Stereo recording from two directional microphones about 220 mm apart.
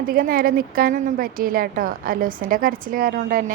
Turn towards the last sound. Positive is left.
turn(degrees=-40)  # may be behind; listen again after turning